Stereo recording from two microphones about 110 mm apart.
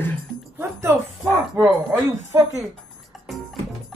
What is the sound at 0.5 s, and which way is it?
Speech, 25° right (ahead or behind).